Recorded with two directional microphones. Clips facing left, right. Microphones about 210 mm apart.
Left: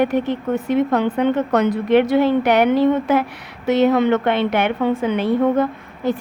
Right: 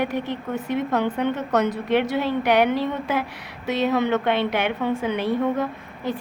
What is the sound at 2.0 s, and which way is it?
Speech, 55° left (ahead or behind).